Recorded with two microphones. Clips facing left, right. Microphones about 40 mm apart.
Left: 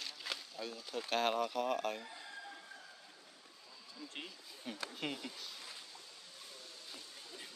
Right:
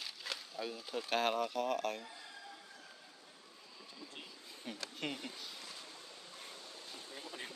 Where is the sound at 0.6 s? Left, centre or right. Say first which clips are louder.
Right 4 dB; centre.